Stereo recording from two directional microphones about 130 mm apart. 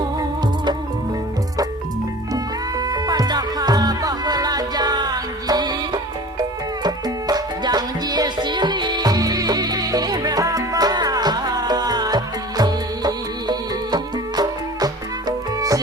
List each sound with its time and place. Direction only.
0.2 s music: 35° right (ahead or behind)
2.3 s music: 30° right (ahead or behind)